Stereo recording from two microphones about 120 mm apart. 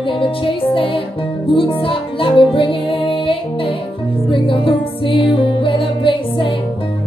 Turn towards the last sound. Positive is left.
turn(degrees=45)  # may be behind; listen again after turning